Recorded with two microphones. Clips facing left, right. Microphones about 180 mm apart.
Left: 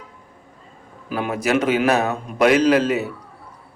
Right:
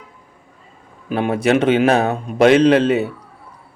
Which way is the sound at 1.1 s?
30° right (ahead or behind).